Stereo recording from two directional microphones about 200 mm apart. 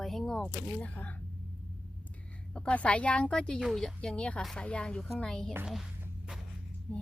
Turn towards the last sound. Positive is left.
turn(degrees=10)  # may be behind; listen again after turning